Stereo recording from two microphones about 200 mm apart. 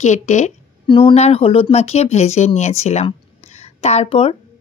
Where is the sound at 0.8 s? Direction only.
25° left (ahead or behind).